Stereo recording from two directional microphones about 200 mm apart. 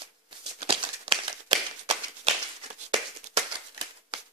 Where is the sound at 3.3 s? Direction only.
25° right (ahead or behind).